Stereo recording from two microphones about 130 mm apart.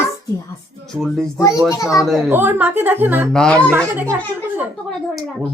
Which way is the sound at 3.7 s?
15° right (ahead or behind).